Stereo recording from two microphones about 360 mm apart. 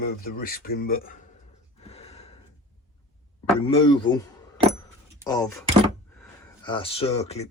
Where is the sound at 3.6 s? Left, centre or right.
Centre.